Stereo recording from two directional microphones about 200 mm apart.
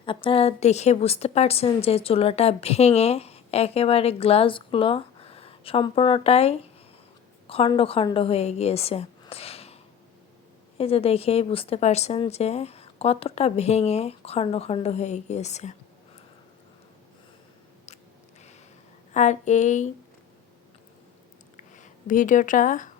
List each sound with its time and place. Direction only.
0.0 s a woman's voice: 25° left (ahead or behind)
10.8 s a woman's voice: 30° left (ahead or behind)
19.1 s a woman's voice: 35° left (ahead or behind)
21.5 s a sound: 40° left (ahead or behind)